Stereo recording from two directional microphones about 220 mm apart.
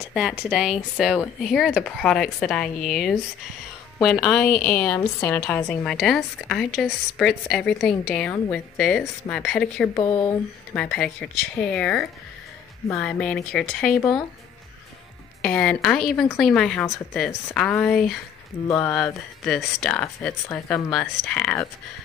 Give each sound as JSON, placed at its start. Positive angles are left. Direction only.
{"t": 0.0, "sound": "a woman's voice", "side_deg": -5}
{"t": 5.9, "sound": "speech", "side_deg": 0}
{"t": 9.9, "sound": "a woman's voice", "side_deg": 15}
{"t": 10.7, "sound": "speech", "side_deg": 5}
{"t": 15.4, "sound": "speech", "side_deg": 5}